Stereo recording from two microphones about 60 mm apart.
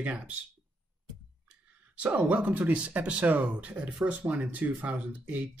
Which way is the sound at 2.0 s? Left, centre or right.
Right.